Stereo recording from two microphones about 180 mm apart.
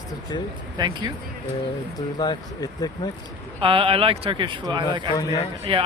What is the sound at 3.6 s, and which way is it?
Speech, 30° right (ahead or behind).